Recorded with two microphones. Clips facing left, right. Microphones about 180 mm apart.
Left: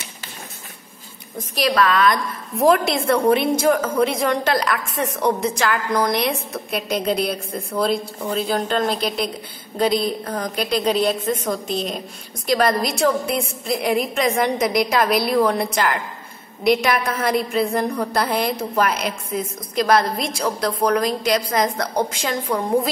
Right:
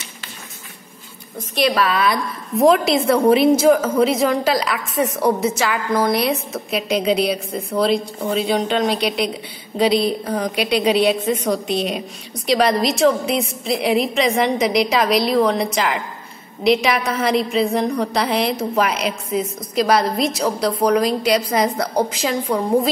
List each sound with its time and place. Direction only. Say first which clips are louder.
1.7 s a woman's voice: left 3 dB; 5° right (ahead or behind)
11.6 s a woman's voice: right 3 dB; 70° right (ahead or behind)
12.5 s a woman's voice: right 2 dB; centre (ahead or behind)